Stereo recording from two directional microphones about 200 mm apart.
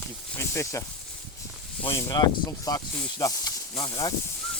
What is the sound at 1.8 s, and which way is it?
Speech, 15° left (ahead or behind).